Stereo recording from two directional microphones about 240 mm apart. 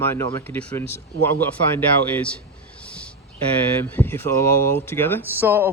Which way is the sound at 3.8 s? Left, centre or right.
Centre.